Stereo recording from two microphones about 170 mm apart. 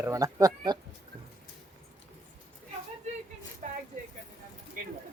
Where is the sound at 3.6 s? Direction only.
45° right (ahead or behind).